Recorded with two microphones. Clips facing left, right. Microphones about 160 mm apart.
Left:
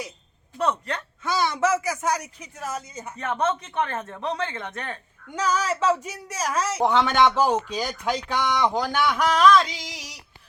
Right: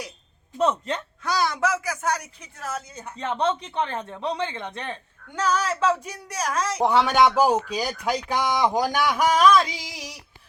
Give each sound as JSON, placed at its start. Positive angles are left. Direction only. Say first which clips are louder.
{"t": 0.6, "sound": "speech", "louder": "right 2 dB", "side_deg": -20}
{"t": 1.2, "sound": "speech", "louder": "left 1 dB", "side_deg": 0}
{"t": 3.2, "sound": "speech", "louder": "right 1 dB", "side_deg": -20}
{"t": 5.3, "sound": "speech", "louder": "even", "side_deg": 10}
{"t": 6.9, "sound": "speech", "louder": "right 2 dB", "side_deg": -10}